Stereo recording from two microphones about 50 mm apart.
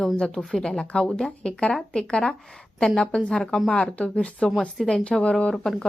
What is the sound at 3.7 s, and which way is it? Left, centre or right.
Speech, left.